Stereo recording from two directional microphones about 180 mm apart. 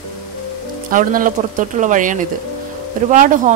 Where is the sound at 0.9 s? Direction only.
50° right (ahead or behind).